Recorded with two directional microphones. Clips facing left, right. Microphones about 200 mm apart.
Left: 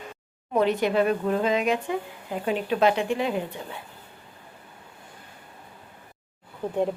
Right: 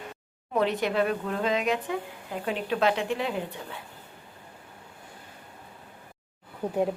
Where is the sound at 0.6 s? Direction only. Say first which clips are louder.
Left 3 dB; centre (ahead or behind).